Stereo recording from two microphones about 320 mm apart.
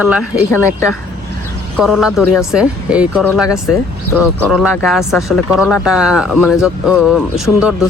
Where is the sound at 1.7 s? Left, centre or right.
Centre.